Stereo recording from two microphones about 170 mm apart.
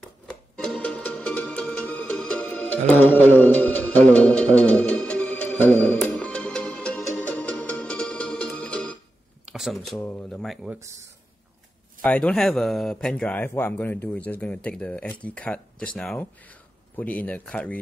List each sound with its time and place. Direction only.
0.3 s music: 5° left (ahead or behind)
9.5 s speech: centre (ahead or behind)
12.0 s speech: 5° left (ahead or behind)